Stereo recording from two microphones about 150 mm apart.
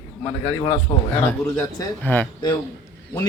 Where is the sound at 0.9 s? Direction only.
35° left (ahead or behind).